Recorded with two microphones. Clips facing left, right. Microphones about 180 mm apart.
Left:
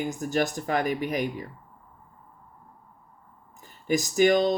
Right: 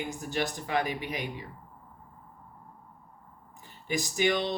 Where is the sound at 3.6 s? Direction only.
45° left (ahead or behind).